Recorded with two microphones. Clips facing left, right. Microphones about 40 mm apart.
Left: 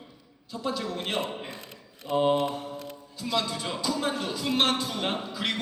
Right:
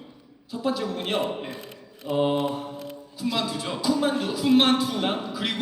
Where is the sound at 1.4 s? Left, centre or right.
Right.